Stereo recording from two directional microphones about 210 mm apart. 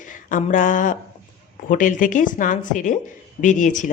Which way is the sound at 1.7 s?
40° left (ahead or behind).